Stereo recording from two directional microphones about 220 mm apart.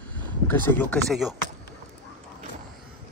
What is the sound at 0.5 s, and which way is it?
Speech, 10° left (ahead or behind).